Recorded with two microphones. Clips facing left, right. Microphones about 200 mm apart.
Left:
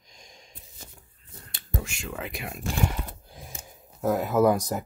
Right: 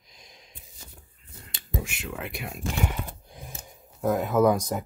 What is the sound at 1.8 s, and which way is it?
Speech, 5° right (ahead or behind).